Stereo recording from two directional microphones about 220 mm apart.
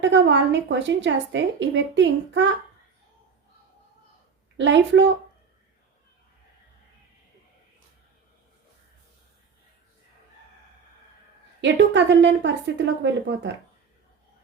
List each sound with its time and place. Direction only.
0.0 s a woman's voice: 55° right (ahead or behind)
4.5 s a woman's voice: 55° right (ahead or behind)
11.6 s a woman's voice: 55° right (ahead or behind)